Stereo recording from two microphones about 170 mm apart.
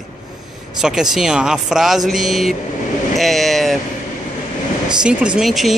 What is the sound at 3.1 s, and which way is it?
Vehicle, centre (ahead or behind).